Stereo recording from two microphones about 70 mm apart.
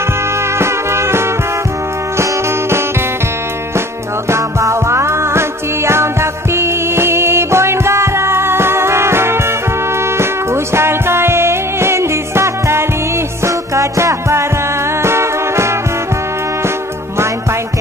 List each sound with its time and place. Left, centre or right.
0.6 s music: right
4.3 s music: right
6.5 s music: right